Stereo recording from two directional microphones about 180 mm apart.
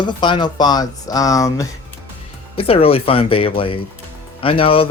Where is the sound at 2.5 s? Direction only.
30° left (ahead or behind).